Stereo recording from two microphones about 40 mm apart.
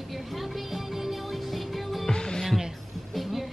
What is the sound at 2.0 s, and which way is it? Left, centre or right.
Music, centre.